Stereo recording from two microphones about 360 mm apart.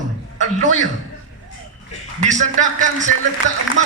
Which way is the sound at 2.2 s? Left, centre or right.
Centre.